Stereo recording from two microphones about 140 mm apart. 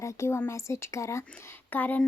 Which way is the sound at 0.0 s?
20° left (ahead or behind).